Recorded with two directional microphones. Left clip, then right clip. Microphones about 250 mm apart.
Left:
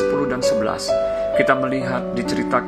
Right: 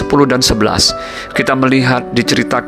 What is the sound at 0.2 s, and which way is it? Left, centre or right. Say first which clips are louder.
Speech: right 7 dB; right.